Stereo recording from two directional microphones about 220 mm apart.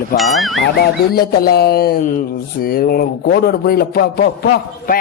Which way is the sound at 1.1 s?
45° left (ahead or behind).